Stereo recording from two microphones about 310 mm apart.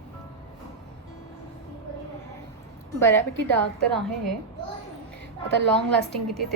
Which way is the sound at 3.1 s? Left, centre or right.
Right.